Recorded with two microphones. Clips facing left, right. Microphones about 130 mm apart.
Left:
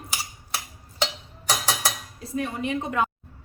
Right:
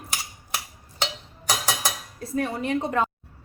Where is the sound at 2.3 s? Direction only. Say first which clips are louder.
Right 2 dB; 40° right (ahead or behind).